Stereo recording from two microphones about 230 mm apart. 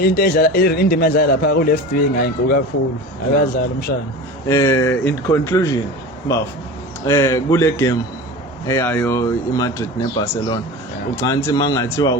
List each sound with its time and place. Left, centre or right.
0.0 s a man's voice: left
4.4 s speech: centre
7.0 s speech: centre